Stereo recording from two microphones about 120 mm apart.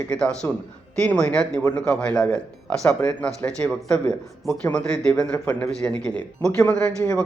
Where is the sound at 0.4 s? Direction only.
20° left (ahead or behind).